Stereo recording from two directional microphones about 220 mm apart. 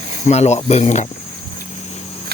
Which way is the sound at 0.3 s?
30° left (ahead or behind).